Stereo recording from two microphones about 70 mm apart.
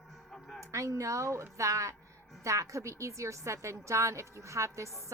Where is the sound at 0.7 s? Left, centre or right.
Right.